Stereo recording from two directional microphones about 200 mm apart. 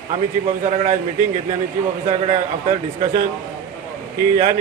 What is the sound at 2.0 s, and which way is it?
A man's voice, 35° right (ahead or behind).